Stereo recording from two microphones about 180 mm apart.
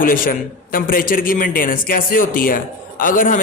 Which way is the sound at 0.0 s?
50° left (ahead or behind).